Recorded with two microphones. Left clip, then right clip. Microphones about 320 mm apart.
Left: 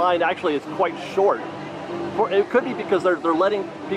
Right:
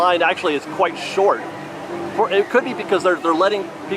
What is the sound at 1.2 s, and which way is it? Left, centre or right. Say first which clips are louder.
Speech: right 2 dB; centre.